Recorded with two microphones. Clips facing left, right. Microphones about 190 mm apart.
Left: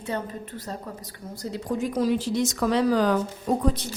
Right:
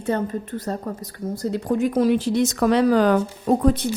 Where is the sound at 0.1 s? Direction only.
50° right (ahead or behind).